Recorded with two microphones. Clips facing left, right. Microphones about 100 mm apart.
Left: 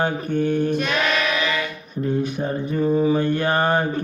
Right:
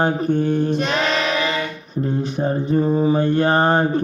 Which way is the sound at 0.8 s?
30° right (ahead or behind).